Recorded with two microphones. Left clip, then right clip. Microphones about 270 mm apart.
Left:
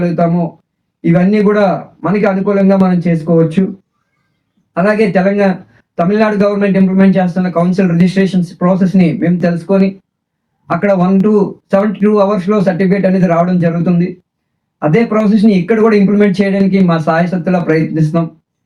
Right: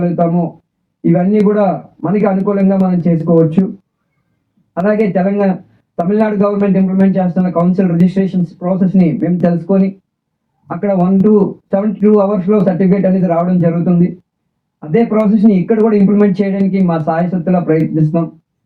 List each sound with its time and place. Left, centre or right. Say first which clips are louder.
0.0 s speech: left 1 dB; left
4.7 s speech: left 2 dB; left